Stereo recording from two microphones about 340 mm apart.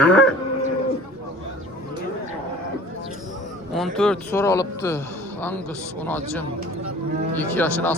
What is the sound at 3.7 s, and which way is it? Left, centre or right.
A man's voice, centre.